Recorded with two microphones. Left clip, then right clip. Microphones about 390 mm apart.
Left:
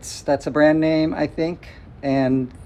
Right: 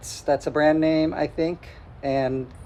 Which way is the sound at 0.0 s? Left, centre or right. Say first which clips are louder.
Left 2 dB; centre.